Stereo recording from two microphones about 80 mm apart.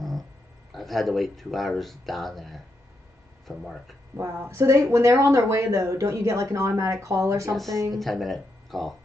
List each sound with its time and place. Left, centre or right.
0.7 s speech: centre
4.2 s speech: right
8.0 s speech: centre